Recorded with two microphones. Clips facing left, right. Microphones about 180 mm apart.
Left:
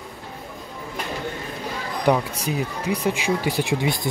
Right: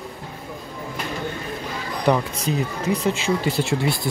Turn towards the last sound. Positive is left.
turn(degrees=15)  # may be behind; listen again after turning